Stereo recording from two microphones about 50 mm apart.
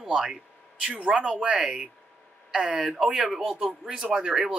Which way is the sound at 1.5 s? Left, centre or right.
Centre.